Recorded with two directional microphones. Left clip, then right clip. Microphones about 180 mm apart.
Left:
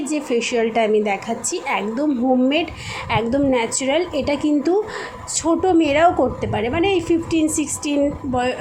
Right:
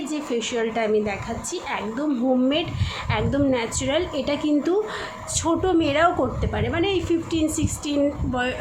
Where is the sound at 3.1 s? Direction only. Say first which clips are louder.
Left 4 dB; 20° left (ahead or behind).